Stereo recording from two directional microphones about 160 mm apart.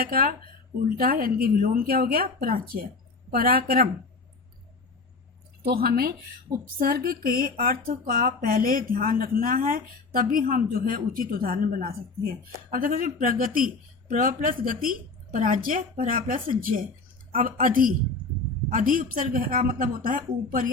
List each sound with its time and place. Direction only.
0.0 s speech: 65° right (ahead or behind)
5.6 s speech: 70° right (ahead or behind)